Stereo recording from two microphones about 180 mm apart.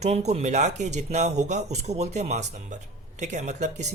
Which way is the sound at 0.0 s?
35° right (ahead or behind).